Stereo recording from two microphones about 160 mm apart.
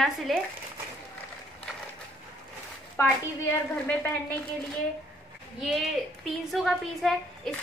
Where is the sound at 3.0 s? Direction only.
20° left (ahead or behind).